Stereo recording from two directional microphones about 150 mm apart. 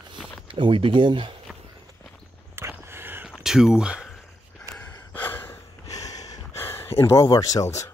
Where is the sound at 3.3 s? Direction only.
5° right (ahead or behind).